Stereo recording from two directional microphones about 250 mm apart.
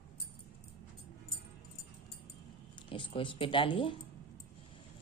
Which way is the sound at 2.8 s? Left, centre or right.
Centre.